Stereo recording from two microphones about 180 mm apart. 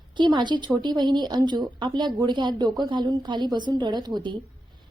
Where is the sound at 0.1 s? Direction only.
25° right (ahead or behind).